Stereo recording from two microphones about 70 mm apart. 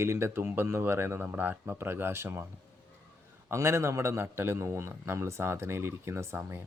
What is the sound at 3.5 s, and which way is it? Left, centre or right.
Speech, right.